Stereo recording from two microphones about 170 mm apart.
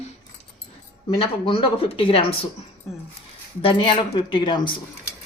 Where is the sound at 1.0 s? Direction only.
35° left (ahead or behind).